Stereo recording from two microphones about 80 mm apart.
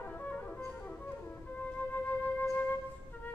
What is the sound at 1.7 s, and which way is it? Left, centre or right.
Music, left.